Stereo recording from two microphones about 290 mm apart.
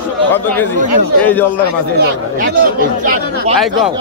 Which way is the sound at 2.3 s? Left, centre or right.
Right.